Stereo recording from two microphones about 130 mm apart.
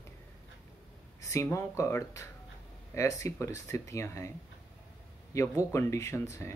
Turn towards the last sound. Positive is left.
turn(degrees=20)  # may be behind; listen again after turning